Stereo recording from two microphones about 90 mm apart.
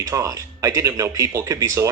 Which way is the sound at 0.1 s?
35° right (ahead or behind).